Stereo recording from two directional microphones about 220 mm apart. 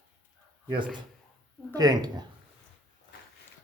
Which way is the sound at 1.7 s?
15° right (ahead or behind).